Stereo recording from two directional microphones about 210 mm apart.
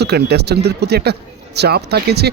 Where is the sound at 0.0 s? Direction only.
50° right (ahead or behind).